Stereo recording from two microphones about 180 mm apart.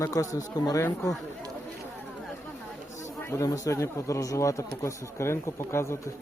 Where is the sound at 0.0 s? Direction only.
20° left (ahead or behind).